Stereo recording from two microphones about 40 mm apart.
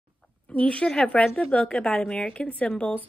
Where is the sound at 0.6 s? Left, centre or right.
Left.